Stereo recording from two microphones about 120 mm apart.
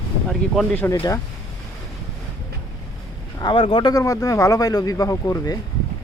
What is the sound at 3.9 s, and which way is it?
Speech, 30° left (ahead or behind).